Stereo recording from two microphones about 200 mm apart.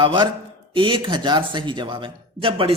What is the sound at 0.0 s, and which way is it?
A man's voice, 25° right (ahead or behind).